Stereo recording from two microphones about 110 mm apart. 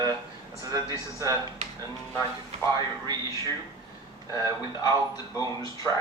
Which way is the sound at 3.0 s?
35° right (ahead or behind).